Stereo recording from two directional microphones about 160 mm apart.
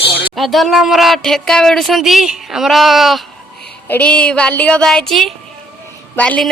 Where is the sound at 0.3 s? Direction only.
Centre (ahead or behind).